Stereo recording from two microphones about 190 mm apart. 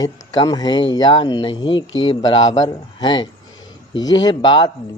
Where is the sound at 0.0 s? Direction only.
20° left (ahead or behind).